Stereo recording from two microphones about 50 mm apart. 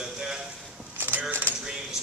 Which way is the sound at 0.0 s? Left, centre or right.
Centre.